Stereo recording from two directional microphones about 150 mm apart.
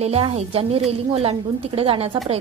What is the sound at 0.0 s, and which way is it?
A woman's voice, 40° right (ahead or behind).